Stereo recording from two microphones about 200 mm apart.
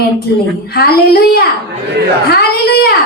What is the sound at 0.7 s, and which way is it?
A woman's voice, 50° left (ahead or behind).